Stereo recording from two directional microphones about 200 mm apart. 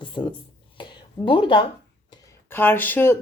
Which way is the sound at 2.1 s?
15° left (ahead or behind).